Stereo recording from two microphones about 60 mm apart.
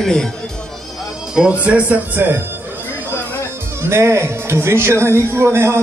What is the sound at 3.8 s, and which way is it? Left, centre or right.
Music, right.